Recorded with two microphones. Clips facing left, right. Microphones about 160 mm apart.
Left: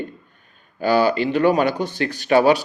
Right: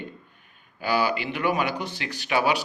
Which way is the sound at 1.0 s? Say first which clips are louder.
Left 7 dB; 10° right (ahead or behind).